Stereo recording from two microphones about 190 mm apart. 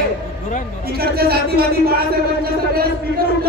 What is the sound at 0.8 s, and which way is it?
Speech, 55° right (ahead or behind).